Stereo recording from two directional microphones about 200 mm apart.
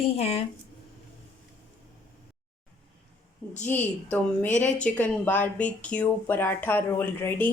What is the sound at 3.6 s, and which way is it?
Speech, 10° left (ahead or behind).